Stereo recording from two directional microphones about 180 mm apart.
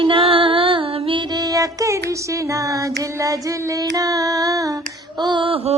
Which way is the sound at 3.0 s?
15° right (ahead or behind).